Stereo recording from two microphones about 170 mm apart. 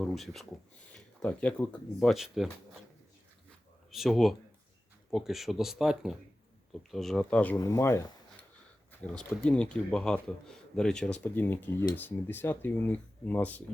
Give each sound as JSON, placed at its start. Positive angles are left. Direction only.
{"t": 0.0, "sound": "speech", "side_deg": 0}
{"t": 3.9, "sound": "speech", "side_deg": 0}
{"t": 7.5, "sound": "speech", "side_deg": 20}
{"t": 8.9, "sound": "speech", "side_deg": 5}